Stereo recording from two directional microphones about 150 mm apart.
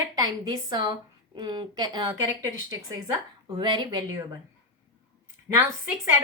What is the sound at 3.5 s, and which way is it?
Speech, 30° right (ahead or behind).